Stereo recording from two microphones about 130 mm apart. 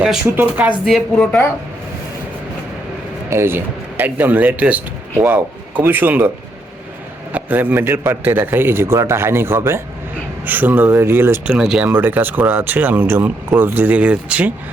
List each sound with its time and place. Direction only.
0.3 s speech: 10° right (ahead or behind)
0.9 s a woman's voice: 5° left (ahead or behind)
3.2 s speech: 20° right (ahead or behind)
7.3 s speech: 15° right (ahead or behind)
11.5 s a woman's voice: 5° right (ahead or behind)